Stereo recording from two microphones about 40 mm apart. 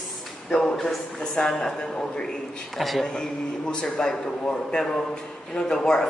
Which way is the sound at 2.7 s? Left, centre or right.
Centre.